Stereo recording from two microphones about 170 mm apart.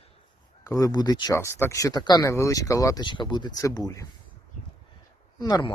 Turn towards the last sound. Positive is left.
turn(degrees=25)  # may be behind; listen again after turning